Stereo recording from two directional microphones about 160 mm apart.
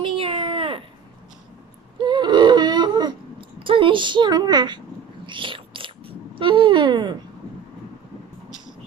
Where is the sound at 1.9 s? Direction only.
30° right (ahead or behind).